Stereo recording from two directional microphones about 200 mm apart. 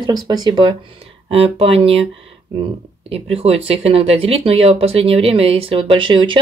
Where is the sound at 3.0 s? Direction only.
30° right (ahead or behind).